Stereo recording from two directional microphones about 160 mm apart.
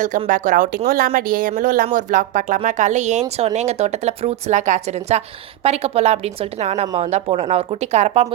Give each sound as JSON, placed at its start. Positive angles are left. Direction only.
{"t": 0.3, "sound": "speech", "side_deg": -55}